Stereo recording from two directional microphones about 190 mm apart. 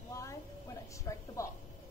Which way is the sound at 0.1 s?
15° left (ahead or behind).